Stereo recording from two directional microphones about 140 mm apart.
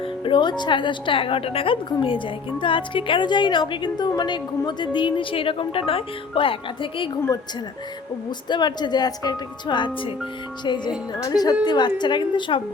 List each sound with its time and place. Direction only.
0.0 s speech: 35° left (ahead or behind)
8.4 s speech: 30° left (ahead or behind)